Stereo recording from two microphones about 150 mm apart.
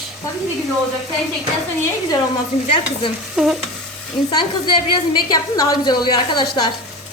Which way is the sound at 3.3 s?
5° right (ahead or behind).